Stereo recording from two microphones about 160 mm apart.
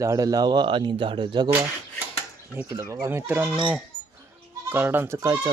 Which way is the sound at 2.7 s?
20° right (ahead or behind).